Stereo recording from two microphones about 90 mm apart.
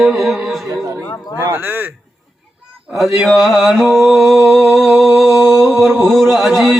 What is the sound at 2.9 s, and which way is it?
Mantra, centre (ahead or behind).